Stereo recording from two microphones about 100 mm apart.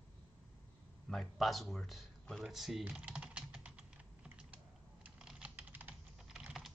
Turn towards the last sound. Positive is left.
turn(degrees=-5)  # may be behind; listen again after turning